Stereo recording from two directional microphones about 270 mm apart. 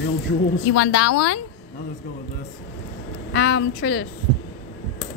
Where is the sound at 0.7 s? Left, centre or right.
Left.